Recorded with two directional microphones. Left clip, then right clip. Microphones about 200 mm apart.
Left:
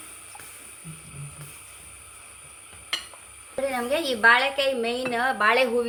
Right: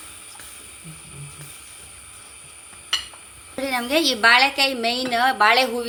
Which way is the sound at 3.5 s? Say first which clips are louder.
Right 4 dB; 35° right (ahead or behind).